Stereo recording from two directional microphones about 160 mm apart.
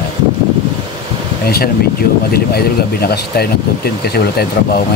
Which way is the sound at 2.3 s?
75° left (ahead or behind).